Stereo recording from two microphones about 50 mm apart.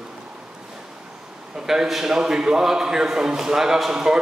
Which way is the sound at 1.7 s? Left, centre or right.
Centre.